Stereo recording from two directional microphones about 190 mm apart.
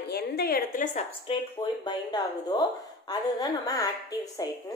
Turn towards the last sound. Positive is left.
turn(degrees=20)  # may be behind; listen again after turning